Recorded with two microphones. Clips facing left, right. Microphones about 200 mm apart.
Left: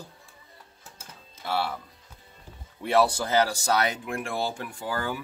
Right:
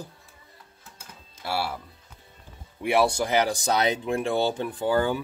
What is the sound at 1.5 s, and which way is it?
Speech, 10° right (ahead or behind).